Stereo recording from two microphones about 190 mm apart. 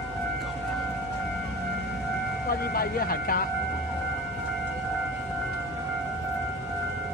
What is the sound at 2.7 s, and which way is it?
Speech, 50° left (ahead or behind).